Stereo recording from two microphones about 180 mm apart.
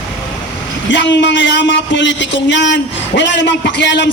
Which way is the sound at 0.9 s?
80° left.